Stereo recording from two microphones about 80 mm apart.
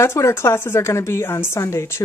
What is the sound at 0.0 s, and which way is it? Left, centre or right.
Speech, left.